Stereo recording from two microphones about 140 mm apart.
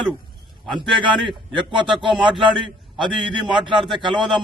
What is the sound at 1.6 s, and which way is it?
Speech, 35° right (ahead or behind).